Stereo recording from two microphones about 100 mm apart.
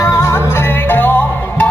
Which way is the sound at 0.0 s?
30° left (ahead or behind).